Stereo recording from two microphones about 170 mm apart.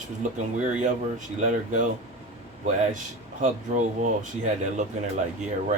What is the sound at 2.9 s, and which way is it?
Speech, 50° right (ahead or behind).